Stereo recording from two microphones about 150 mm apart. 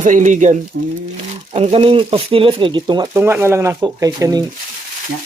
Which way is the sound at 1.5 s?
45° right (ahead or behind).